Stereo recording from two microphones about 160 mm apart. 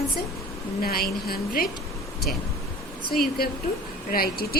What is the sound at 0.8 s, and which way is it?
Speech, 70° left (ahead or behind).